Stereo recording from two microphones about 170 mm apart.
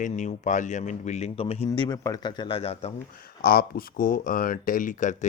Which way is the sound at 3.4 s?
60° left (ahead or behind).